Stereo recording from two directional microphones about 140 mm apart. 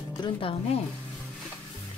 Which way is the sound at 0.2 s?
40° left (ahead or behind).